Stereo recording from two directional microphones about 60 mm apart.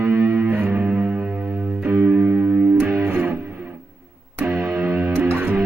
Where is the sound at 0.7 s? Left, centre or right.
Right.